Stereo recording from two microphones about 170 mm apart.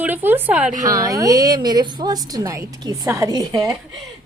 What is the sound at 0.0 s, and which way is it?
Speech, 10° right (ahead or behind).